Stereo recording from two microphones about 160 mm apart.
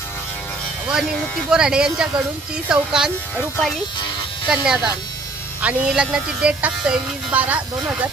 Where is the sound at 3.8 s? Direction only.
30° left (ahead or behind).